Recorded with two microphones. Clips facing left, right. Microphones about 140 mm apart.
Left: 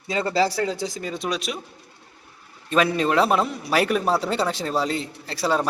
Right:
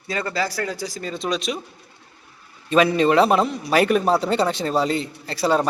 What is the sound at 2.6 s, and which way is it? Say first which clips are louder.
A man's voice: right 4 dB; centre (ahead or behind).